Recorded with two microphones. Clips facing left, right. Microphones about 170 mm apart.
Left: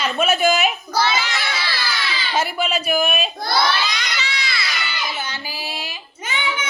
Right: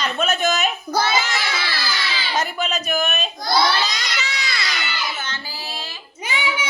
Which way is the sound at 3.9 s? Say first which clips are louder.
Left 1 dB; 45° right (ahead or behind).